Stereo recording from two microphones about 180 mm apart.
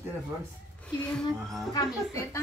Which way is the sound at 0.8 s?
5° left (ahead or behind).